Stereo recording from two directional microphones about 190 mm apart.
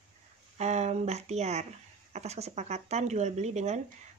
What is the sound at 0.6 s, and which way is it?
Speech, 35° right (ahead or behind).